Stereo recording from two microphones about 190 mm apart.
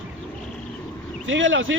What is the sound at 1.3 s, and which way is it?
Speech, 85° right.